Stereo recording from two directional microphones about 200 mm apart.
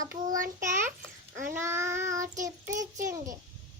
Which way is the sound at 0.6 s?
40° right (ahead or behind).